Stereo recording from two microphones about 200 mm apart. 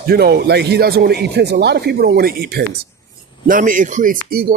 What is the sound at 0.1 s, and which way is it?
Speech, 50° right (ahead or behind).